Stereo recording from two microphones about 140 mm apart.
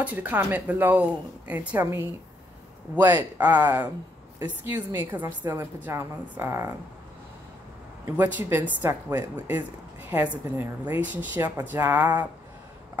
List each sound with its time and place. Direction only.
0.0 s speech: 10° right (ahead or behind)
8.2 s speech: 10° right (ahead or behind)